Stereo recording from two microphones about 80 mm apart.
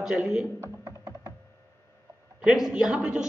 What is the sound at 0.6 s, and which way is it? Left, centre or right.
Computer keyboard, right.